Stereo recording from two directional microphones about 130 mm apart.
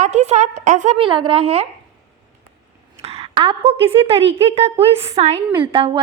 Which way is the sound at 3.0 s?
50° right (ahead or behind).